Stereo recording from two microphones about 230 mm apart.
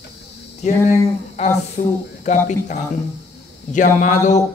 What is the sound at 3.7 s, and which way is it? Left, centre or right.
Speech, left.